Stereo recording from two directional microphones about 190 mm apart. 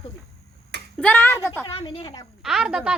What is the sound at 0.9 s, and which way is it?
Speech, 10° left (ahead or behind).